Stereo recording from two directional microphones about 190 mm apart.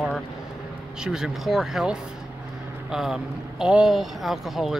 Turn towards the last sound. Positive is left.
turn(degrees=0)  # may be behind; listen again after turning